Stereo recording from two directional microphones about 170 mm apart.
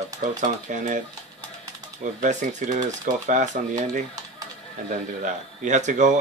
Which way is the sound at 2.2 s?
45° right (ahead or behind).